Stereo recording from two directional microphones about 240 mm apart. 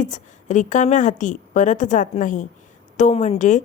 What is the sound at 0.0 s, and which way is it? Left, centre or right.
A woman's voice, left.